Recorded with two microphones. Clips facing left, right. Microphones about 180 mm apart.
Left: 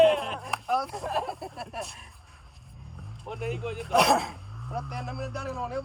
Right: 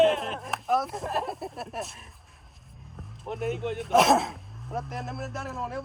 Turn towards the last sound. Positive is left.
turn(degrees=0)  # may be behind; listen again after turning